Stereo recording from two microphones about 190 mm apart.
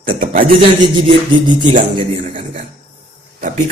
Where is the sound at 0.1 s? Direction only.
50° right (ahead or behind).